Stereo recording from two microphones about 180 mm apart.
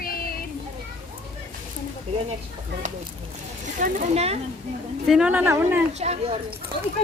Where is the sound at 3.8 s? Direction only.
45° right (ahead or behind).